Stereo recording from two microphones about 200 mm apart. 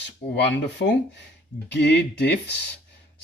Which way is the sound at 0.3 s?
60° left (ahead or behind).